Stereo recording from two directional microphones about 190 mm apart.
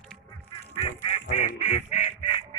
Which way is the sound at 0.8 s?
35° left (ahead or behind).